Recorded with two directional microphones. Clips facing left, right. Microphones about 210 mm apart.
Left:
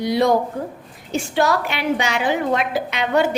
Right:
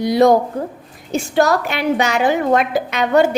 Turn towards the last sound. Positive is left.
turn(degrees=-45)  # may be behind; listen again after turning